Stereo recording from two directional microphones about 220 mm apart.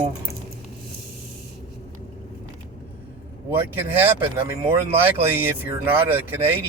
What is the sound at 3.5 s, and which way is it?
Speech, 10° right (ahead or behind).